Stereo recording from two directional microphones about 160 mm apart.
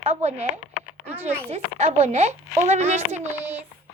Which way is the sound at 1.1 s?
10° right (ahead or behind).